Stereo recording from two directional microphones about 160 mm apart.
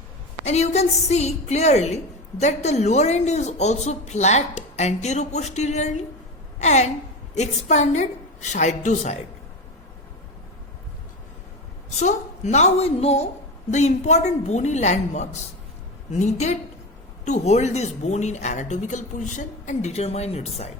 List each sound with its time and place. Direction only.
0.4 s a woman's voice: 45° left (ahead or behind)
11.9 s a woman's voice: 45° left (ahead or behind)